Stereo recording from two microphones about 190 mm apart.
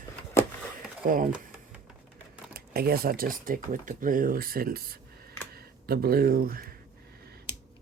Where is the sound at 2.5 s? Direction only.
50° right (ahead or behind).